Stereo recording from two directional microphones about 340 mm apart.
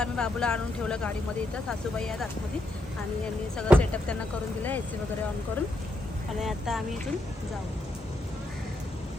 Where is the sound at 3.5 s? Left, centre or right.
Centre.